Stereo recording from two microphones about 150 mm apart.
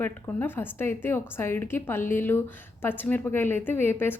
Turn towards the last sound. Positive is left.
turn(degrees=15)  # may be behind; listen again after turning